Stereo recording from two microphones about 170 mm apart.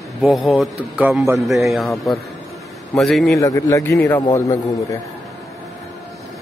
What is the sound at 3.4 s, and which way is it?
A man's voice, 20° left (ahead or behind).